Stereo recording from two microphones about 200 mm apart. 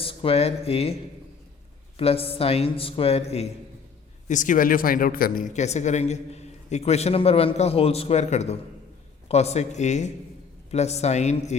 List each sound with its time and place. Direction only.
0.0 s speech: 25° left (ahead or behind)
2.0 s speech: 30° left (ahead or behind)